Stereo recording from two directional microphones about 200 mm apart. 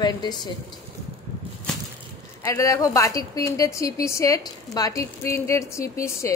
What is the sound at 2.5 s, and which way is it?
A woman's voice, 15° left (ahead or behind).